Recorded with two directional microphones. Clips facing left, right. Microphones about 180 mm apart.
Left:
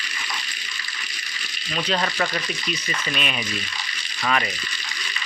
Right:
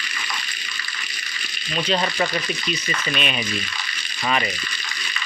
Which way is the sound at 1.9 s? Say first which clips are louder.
Right 2 dB; 5° right (ahead or behind).